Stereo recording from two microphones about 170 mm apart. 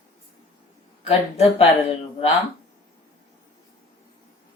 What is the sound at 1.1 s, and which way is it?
Speech, 35° left (ahead or behind).